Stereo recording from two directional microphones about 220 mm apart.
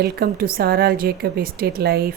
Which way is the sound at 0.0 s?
45° right (ahead or behind).